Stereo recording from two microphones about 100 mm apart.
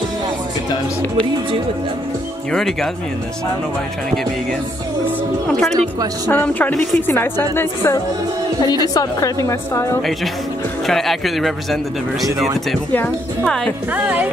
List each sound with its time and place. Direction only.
2.5 s a man's voice: 5° left (ahead or behind)
5.5 s a man's voice: 5° left (ahead or behind)
6.2 s a woman's voice: 20° left (ahead or behind)
8.8 s a woman's voice: 35° left (ahead or behind)
10.9 s a man's voice: centre (ahead or behind)
12.9 s speech: 15° left (ahead or behind)
13.9 s speech: 15° right (ahead or behind)